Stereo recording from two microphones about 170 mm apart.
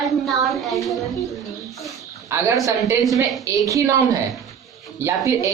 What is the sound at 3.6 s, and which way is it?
Speech, 20° right (ahead or behind).